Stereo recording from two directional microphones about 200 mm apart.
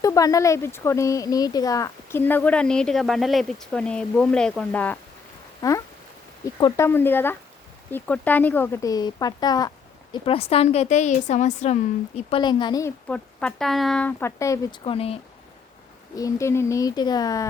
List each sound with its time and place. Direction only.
0.0 s speech: 15° left (ahead or behind); by 12.4 s 30° left (ahead or behind)
12.4 s speech: 20° left (ahead or behind)
13.1 s speech: 5° left (ahead or behind); by 15.2 s 30° left (ahead or behind)
16.1 s speech: 15° left (ahead or behind)